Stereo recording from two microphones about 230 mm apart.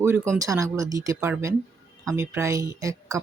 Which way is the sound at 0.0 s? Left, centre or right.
Centre.